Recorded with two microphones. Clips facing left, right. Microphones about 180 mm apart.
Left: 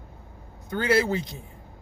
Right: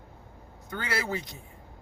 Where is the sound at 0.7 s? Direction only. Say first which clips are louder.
Left 9 dB; 25° left (ahead or behind).